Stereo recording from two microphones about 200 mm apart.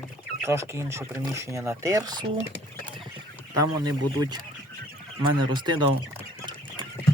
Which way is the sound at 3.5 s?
20° right (ahead or behind).